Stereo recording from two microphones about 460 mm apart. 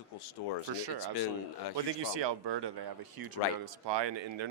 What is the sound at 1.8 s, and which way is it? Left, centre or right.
Speech, right.